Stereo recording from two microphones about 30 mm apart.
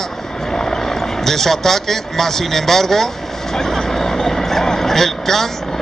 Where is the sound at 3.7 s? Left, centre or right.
Centre.